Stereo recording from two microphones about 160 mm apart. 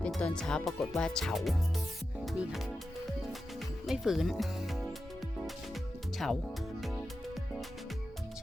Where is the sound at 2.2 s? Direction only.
Centre (ahead or behind).